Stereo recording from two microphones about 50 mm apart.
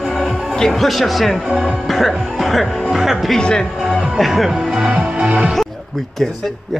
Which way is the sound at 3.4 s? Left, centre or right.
Centre.